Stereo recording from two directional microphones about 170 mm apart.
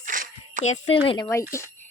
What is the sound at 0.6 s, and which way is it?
Speech, 40° left (ahead or behind).